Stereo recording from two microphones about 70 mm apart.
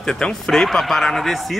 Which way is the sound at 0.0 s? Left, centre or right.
Centre.